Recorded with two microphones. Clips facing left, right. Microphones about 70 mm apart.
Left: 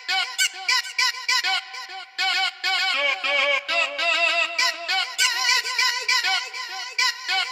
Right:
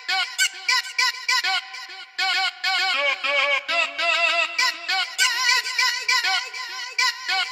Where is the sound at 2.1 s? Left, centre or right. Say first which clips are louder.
Right 1 dB; centre.